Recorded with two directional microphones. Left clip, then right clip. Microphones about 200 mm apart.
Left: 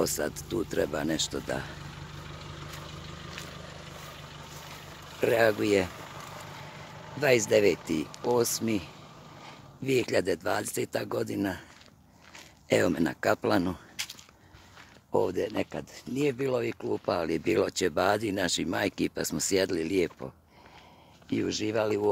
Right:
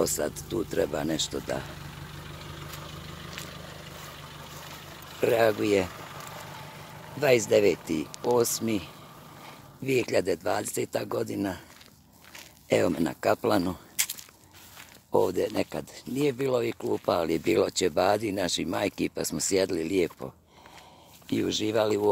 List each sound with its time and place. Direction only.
0.0 s speech: centre (ahead or behind)
2.2 s vehicle: 50° right (ahead or behind)
5.2 s speech: centre (ahead or behind)
5.9 s a sound: 50° right (ahead or behind)
7.2 s speech: centre (ahead or behind)
12.6 s speech: 5° left (ahead or behind)
14.0 s biting: 60° right (ahead or behind)
15.0 s speech: 10° right (ahead or behind)